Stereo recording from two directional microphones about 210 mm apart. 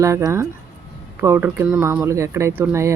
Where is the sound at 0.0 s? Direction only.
15° right (ahead or behind).